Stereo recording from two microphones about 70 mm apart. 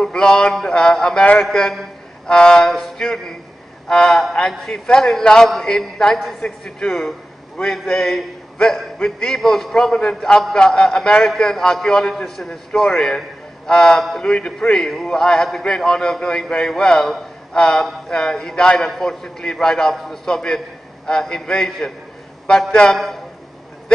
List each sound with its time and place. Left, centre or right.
0.0 s a man's voice: centre